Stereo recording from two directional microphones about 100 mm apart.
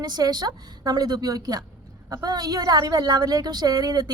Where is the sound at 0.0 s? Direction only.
40° right (ahead or behind).